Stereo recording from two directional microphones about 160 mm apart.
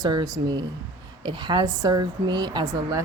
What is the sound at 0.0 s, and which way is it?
Speech, 25° right (ahead or behind).